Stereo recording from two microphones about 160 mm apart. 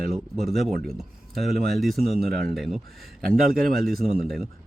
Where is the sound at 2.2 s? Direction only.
70° right (ahead or behind).